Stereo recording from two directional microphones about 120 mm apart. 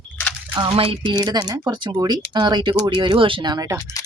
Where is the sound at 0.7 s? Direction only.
45° right (ahead or behind).